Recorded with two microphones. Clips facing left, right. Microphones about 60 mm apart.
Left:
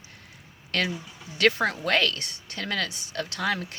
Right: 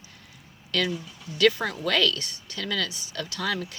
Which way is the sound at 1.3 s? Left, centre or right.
Left.